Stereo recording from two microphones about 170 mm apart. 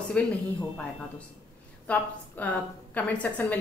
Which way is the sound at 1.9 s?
5° left (ahead or behind).